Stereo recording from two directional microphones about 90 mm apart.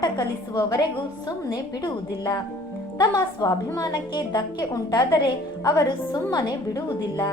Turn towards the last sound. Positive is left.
turn(degrees=45)  # may be behind; listen again after turning